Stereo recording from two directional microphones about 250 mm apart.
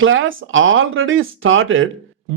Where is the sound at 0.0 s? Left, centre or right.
Right.